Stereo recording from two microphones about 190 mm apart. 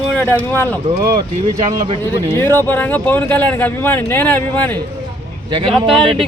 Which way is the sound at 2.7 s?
10° left (ahead or behind).